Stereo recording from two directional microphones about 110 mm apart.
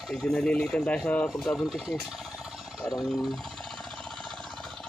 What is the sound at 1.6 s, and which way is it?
Speech, 5° right (ahead or behind).